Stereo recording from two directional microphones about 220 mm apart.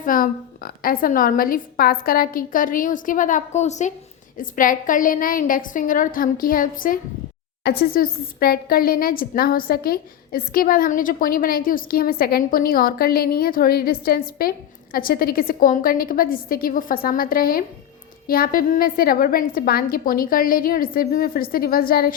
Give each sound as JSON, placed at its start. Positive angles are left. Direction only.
{"t": 0.0, "sound": "speech", "side_deg": 40}